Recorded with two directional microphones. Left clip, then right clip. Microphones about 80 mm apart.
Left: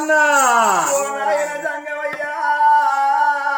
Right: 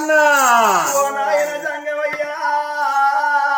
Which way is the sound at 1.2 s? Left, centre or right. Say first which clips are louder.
Right 1 dB; left.